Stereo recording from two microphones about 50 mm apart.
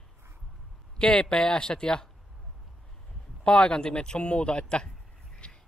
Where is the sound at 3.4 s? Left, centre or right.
Centre.